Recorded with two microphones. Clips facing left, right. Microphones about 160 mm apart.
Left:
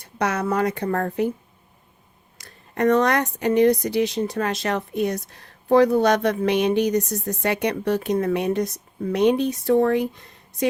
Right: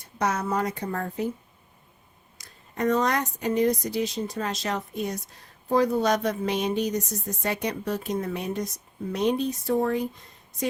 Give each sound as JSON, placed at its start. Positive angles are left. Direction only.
{"t": 0.2, "sound": "speech", "side_deg": 70}
{"t": 2.4, "sound": "speech", "side_deg": 65}